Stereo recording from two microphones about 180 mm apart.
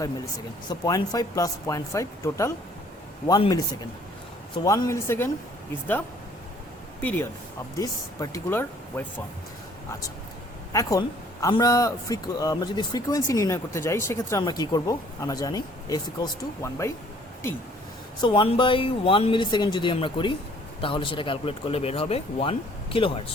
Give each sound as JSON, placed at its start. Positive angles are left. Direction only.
{"t": 0.0, "sound": "speech", "side_deg": 20}
{"t": 7.0, "sound": "speech", "side_deg": 10}
{"t": 10.7, "sound": "speech", "side_deg": 20}
{"t": 18.2, "sound": "speech", "side_deg": 25}